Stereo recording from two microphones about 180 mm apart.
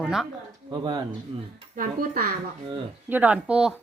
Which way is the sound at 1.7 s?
50° right (ahead or behind).